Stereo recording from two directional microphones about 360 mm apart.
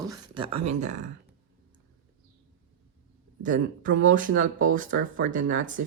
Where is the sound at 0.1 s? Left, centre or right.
Centre.